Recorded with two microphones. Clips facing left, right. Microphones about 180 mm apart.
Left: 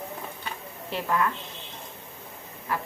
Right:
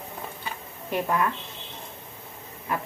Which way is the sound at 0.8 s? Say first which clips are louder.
Right 2 dB; 15° right (ahead or behind).